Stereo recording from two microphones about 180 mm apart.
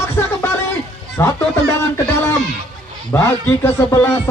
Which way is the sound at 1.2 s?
15° left (ahead or behind).